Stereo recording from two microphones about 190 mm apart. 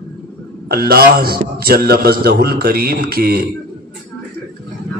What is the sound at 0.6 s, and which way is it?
A man's voice, 55° right (ahead or behind).